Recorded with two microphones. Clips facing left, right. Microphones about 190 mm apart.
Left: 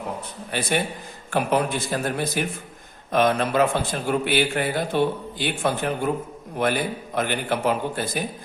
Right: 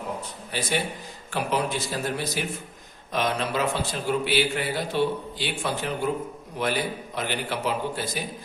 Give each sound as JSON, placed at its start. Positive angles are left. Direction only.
{"t": 0.5, "sound": "a man's voice", "side_deg": 55}